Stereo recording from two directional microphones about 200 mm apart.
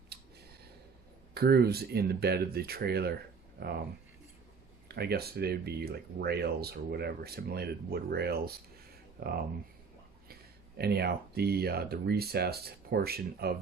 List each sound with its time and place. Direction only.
1.3 s speech: 50° right (ahead or behind)
4.9 s speech: 55° right (ahead or behind)
10.8 s speech: 55° right (ahead or behind)